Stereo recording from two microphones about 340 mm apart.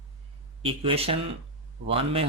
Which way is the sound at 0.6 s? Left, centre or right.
Centre.